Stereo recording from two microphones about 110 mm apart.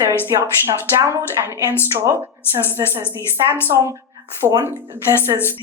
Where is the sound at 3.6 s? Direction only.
25° right (ahead or behind).